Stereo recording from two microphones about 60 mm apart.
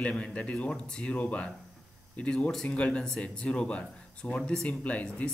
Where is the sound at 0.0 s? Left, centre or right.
Centre.